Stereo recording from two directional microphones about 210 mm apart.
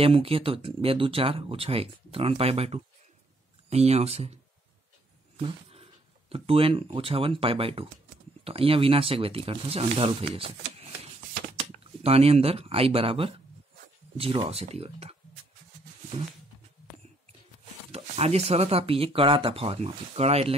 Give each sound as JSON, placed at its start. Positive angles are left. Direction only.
{"t": 0.0, "sound": "speech", "side_deg": -25}
{"t": 5.4, "sound": "speech", "side_deg": -25}
{"t": 12.0, "sound": "speech", "side_deg": -30}
{"t": 17.9, "sound": "speech", "side_deg": -30}